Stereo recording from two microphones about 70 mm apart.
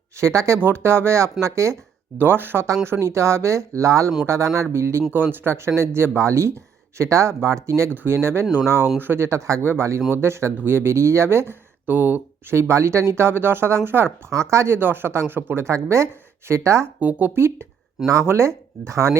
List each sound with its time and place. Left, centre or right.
0.2 s speech: right
0.6 s speech: right
2.1 s speech: right
5.1 s speech: right
12.5 s speech: right
14.3 s speech: right
14.8 s speech: right
17.0 s speech: right
17.3 s speech: right